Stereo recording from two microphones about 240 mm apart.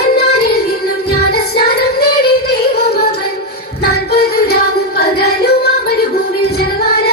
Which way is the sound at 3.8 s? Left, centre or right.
Left.